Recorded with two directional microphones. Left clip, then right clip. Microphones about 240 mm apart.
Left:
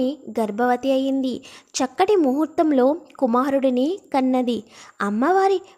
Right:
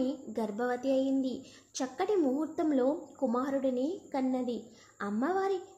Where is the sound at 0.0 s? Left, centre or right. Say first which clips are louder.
Left 11 dB; left.